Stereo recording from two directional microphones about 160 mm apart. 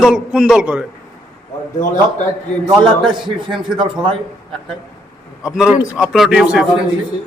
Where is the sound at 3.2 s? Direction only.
30° right (ahead or behind).